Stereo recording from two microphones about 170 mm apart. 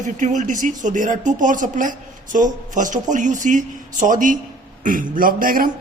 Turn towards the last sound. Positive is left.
turn(degrees=-55)  # may be behind; listen again after turning